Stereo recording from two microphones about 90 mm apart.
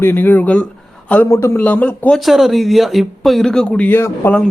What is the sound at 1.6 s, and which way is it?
Speech, 20° left (ahead or behind).